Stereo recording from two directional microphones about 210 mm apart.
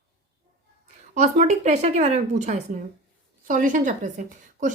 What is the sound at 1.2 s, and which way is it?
A woman's voice, 35° right (ahead or behind).